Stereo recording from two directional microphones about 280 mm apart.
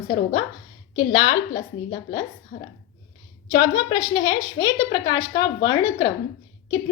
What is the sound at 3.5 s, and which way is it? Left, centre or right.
A woman's voice, centre.